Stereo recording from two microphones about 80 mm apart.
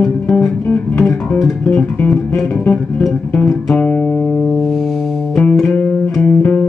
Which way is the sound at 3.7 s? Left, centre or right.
Centre.